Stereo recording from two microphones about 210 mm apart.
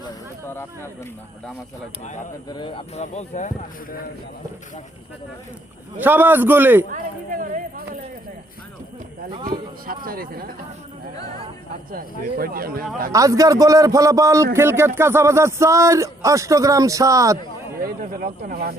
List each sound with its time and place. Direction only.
0.0 s a sound: 10° left (ahead or behind)
2.5 s speech: 25° left (ahead or behind)
6.0 s a man's voice: 10° right (ahead or behind)
6.9 s speech: 40° right (ahead or behind)
9.3 s speech: 20° right (ahead or behind)
9.8 s speech: 45° right (ahead or behind)
11.9 s speech: 45° right (ahead or behind)
13.1 s a man's voice: 15° right (ahead or behind)
17.8 s speech: 45° right (ahead or behind)